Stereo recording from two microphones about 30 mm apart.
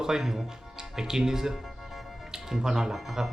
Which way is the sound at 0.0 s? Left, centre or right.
Centre.